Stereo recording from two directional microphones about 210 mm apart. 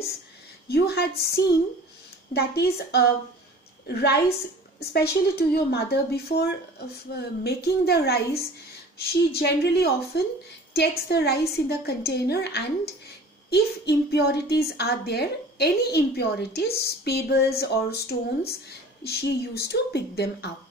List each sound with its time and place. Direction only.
0.7 s a woman's voice: 50° left (ahead or behind)
2.3 s a woman's voice: 50° left (ahead or behind)